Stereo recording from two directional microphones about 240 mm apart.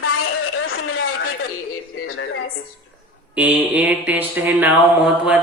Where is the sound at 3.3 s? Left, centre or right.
Centre.